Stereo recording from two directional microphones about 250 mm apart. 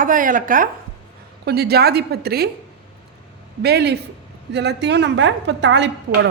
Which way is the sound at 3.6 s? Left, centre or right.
Right.